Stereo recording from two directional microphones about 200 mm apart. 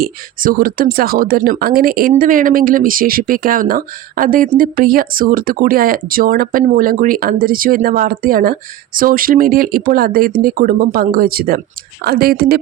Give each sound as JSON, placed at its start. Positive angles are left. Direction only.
{"t": 0.0, "sound": "speech", "side_deg": -45}